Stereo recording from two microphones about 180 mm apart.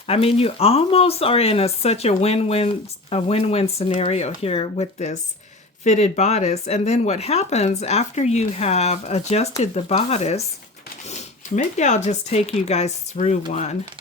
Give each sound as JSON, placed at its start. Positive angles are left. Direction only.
{"t": 0.1, "sound": "speech", "side_deg": 30}